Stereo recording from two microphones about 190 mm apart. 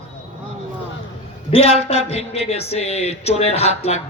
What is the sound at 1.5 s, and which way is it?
Speech, 30° left (ahead or behind).